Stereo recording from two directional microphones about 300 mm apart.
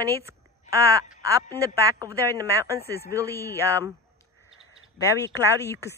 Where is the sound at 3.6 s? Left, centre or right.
Centre.